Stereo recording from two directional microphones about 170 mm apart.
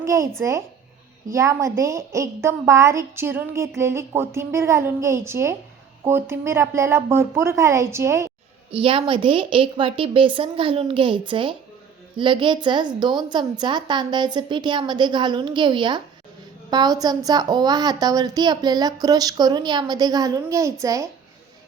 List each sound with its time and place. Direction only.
0.0 s a woman's voice: 15° right (ahead or behind)
8.7 s a woman's voice: 30° right (ahead or behind)